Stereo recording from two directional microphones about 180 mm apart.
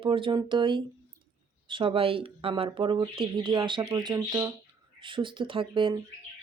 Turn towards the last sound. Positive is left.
turn(degrees=-30)  # may be behind; listen again after turning